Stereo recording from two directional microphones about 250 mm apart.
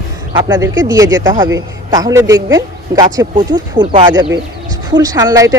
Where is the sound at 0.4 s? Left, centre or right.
Centre.